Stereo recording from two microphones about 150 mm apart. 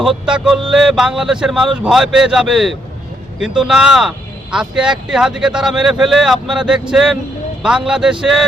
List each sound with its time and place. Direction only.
0.0 s speech: 5° right (ahead or behind)